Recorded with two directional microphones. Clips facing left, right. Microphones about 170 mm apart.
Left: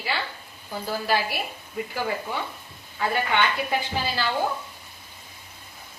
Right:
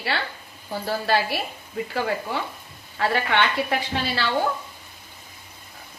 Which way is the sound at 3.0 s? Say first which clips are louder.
Right 2 dB; 75° right (ahead or behind).